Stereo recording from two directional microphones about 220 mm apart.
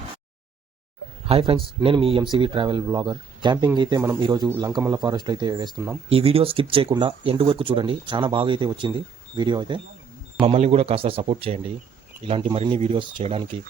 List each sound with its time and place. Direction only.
1.3 s speech: 25° right (ahead or behind)
6.1 s speech: 25° right (ahead or behind)